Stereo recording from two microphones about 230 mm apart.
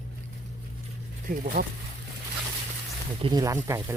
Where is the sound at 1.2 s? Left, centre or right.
Right.